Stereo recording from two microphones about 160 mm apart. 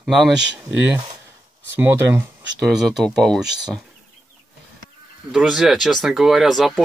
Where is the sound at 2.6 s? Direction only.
Centre (ahead or behind).